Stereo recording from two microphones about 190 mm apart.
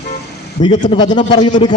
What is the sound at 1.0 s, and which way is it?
Speech, 25° left (ahead or behind).